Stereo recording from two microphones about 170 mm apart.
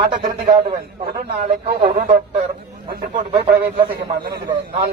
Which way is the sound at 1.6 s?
55° right (ahead or behind).